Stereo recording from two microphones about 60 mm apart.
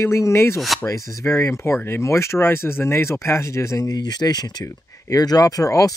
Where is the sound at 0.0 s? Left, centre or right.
Left.